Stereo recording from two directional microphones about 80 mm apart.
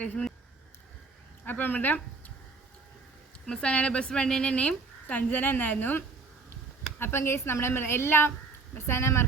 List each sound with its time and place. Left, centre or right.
0.0 s speech: centre
1.5 s speech: left
3.4 s a woman's voice: centre
7.0 s a woman's voice: left